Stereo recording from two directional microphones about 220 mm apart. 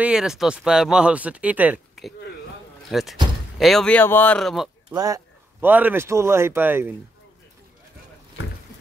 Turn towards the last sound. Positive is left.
turn(degrees=-10)  # may be behind; listen again after turning